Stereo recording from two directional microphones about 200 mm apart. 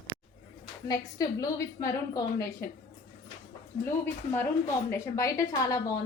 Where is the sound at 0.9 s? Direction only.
20° left (ahead or behind).